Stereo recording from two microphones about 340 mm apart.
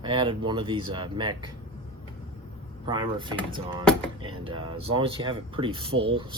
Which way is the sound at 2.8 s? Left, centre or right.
Centre.